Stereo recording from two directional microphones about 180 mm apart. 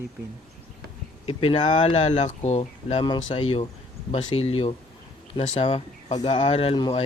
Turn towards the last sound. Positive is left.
turn(degrees=30)  # may be behind; listen again after turning